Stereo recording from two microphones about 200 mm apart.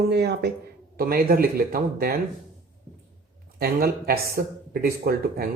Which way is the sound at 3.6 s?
50° right (ahead or behind).